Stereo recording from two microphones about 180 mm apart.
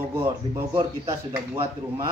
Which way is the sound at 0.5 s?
25° right (ahead or behind).